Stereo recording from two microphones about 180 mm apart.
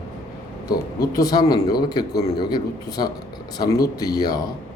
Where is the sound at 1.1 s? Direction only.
20° left (ahead or behind).